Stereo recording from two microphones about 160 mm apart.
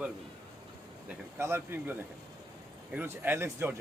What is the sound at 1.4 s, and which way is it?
Speech, 15° right (ahead or behind).